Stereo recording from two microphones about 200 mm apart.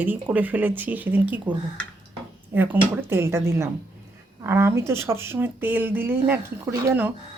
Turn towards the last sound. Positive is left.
turn(degrees=-10)  # may be behind; listen again after turning